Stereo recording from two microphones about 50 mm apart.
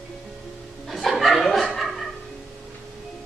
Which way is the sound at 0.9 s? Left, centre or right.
Centre.